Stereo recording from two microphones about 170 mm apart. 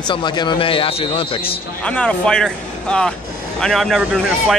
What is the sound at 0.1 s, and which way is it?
Speech, 25° left (ahead or behind).